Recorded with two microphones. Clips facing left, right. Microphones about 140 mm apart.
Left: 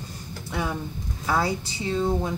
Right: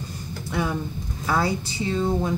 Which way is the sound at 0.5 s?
15° left (ahead or behind).